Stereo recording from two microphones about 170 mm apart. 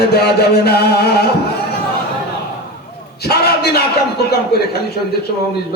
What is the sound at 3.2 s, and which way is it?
Speech, 70° left (ahead or behind).